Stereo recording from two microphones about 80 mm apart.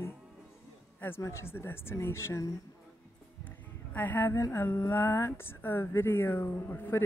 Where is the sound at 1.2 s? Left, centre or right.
Left.